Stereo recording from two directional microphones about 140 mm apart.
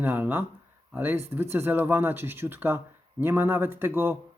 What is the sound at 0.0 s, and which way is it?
Speech, 15° right (ahead or behind).